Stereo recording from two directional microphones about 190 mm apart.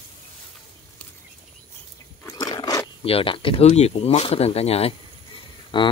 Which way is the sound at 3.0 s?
30° left (ahead or behind).